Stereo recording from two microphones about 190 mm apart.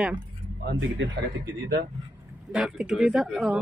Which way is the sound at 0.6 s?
65° right (ahead or behind).